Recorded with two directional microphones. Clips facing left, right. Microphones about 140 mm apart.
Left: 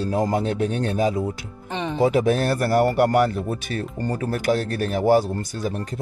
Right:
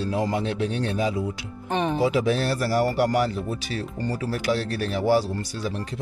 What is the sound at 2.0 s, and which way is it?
Speech, 50° left (ahead or behind).